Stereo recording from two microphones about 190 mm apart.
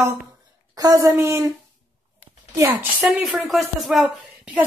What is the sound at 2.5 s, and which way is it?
A woman's voice, 15° right (ahead or behind).